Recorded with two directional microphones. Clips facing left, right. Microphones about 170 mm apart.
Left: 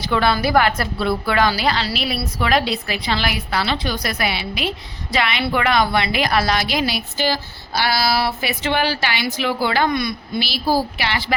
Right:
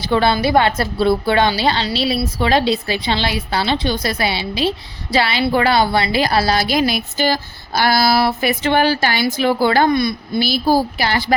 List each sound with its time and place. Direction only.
0.0 s a woman's voice: 30° right (ahead or behind)
10.4 s a woman's voice: 45° right (ahead or behind)